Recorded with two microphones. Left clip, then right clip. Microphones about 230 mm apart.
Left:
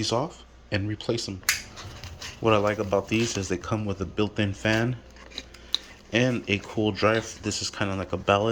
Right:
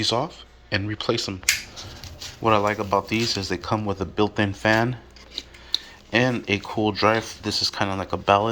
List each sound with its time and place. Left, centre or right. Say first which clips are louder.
0.0 s speech: right 4 dB; centre
6.1 s speech: right 3 dB; centre